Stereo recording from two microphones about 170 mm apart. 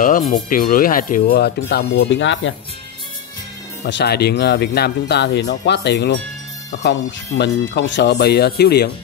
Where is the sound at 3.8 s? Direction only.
75° left (ahead or behind).